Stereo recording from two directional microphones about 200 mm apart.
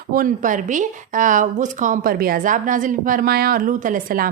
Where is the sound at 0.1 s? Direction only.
45° right (ahead or behind).